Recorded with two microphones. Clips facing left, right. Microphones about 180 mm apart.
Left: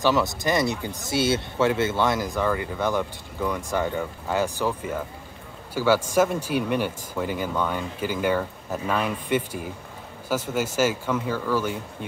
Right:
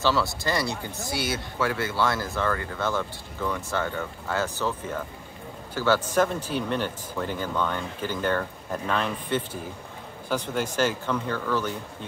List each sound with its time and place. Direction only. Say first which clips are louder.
0.0 s speech: left 3 dB; 20° left (ahead or behind)